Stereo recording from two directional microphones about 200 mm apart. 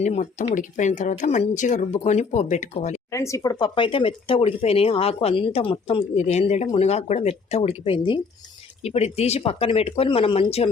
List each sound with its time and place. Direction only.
0.0 s speech: 35° left (ahead or behind)
3.1 s speech: 15° left (ahead or behind)